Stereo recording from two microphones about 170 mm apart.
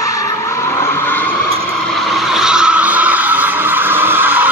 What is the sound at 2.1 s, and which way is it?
Vehicle, 5° right (ahead or behind).